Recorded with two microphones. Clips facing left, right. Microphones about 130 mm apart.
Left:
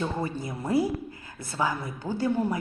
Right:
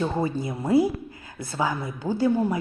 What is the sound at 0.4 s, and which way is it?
A woman's voice, 20° right (ahead or behind).